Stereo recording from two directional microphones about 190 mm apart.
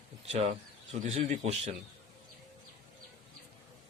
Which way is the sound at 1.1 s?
35° right (ahead or behind).